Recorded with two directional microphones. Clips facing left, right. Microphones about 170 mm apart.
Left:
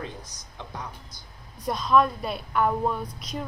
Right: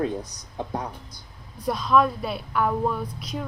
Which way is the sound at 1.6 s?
Centre (ahead or behind).